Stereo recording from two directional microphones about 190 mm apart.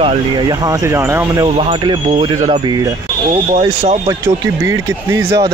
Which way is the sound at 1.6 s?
25° right (ahead or behind).